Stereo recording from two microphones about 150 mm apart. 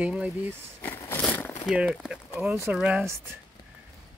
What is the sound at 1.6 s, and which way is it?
Speech, 5° right (ahead or behind).